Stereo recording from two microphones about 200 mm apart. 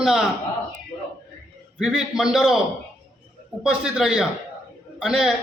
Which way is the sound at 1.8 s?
5° right (ahead or behind).